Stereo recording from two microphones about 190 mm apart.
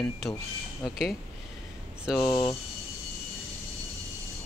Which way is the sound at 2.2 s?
15° left (ahead or behind).